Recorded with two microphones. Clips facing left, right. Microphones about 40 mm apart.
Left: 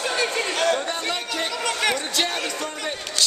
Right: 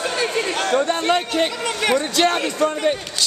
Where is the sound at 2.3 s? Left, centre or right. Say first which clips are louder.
Right 8 dB; centre.